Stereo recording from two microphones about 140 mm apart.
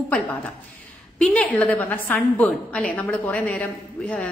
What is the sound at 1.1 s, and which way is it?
A woman's voice, 5° left (ahead or behind).